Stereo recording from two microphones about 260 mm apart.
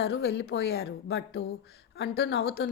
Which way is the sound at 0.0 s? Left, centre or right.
Left.